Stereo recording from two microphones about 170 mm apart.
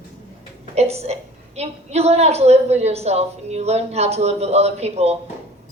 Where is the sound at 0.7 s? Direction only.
40° right (ahead or behind).